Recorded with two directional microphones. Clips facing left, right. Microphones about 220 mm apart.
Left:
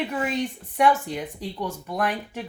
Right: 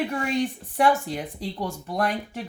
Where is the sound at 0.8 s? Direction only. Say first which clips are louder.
Even; 30° right (ahead or behind).